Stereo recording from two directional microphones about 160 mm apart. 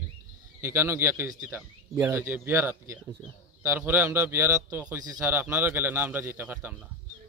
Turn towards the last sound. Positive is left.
turn(degrees=-10)  # may be behind; listen again after turning